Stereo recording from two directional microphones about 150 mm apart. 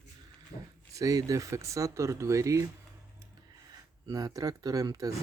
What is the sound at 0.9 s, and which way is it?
Speech, 25° right (ahead or behind).